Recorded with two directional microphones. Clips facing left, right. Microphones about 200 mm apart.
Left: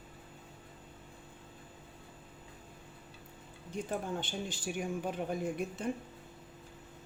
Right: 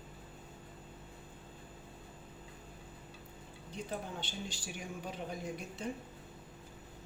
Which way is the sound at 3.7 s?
50° left (ahead or behind).